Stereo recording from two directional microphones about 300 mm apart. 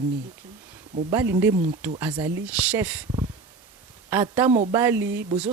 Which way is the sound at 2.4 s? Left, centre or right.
Centre.